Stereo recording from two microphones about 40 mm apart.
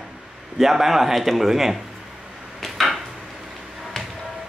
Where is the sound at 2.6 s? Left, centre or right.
Centre.